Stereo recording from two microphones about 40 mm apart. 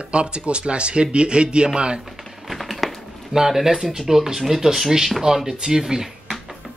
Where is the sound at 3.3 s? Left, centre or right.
Centre.